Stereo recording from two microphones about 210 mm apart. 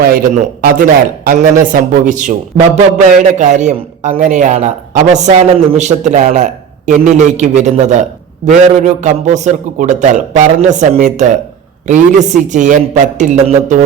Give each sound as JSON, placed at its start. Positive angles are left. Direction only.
{"t": 0.6, "sound": "a man's voice", "side_deg": -45}